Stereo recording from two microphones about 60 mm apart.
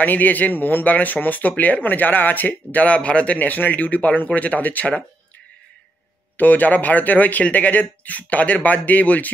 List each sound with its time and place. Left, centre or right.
0.0 s speech: left
6.3 s speech: left